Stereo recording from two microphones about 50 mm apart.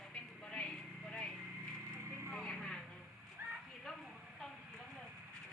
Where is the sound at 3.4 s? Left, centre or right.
Right.